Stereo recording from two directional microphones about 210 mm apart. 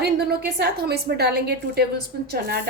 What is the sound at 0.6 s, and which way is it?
A woman's voice, 50° right (ahead or behind).